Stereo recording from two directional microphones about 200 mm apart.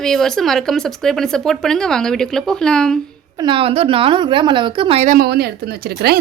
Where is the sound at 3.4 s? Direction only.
25° right (ahead or behind).